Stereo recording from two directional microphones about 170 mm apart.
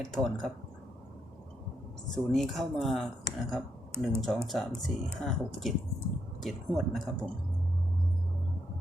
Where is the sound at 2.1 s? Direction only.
Centre (ahead or behind).